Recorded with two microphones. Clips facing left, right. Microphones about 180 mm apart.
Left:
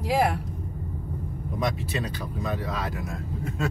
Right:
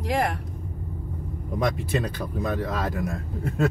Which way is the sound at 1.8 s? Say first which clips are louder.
Right 4 dB; 50° right (ahead or behind).